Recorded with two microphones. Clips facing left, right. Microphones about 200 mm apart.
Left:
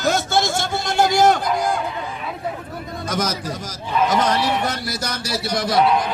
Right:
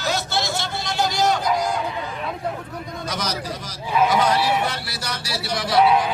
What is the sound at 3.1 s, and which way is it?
A man's voice, 50° left (ahead or behind).